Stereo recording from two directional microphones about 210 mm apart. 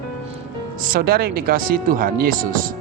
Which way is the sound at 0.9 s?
45° right (ahead or behind).